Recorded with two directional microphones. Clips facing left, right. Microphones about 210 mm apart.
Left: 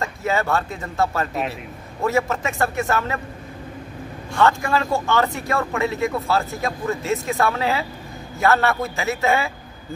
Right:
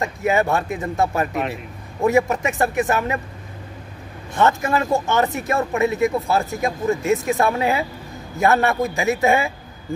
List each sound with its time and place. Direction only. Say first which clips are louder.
0.0 s speech: right 3 dB; 15° right (ahead or behind)
4.4 s speech: right 1 dB; 20° right (ahead or behind)